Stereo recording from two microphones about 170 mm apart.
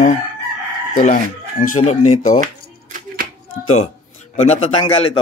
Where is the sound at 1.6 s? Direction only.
45° left (ahead or behind).